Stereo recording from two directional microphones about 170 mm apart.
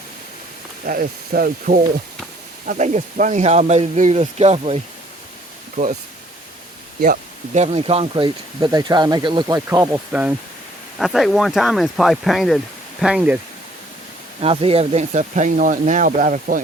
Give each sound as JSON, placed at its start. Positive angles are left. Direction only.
{"t": 0.9, "sound": "speech", "side_deg": -60}
{"t": 2.6, "sound": "speech", "side_deg": -45}
{"t": 5.7, "sound": "speech", "side_deg": -50}
{"t": 7.0, "sound": "speech", "side_deg": -45}
{"t": 10.1, "sound": "speech", "side_deg": -10}
{"t": 14.4, "sound": "speech", "side_deg": -35}